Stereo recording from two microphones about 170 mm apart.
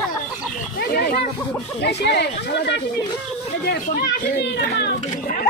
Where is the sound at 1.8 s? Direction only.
85° left.